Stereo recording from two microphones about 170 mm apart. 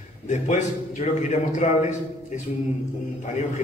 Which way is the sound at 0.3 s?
45° left (ahead or behind).